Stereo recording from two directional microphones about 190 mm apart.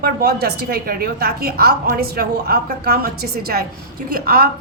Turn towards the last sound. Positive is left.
turn(degrees=-50)  # may be behind; listen again after turning